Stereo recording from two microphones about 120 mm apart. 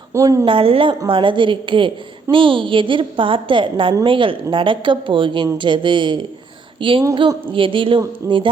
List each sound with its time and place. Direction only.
0.1 s a woman's voice: 25° right (ahead or behind)
0.4 s a woman's voice: 50° right (ahead or behind)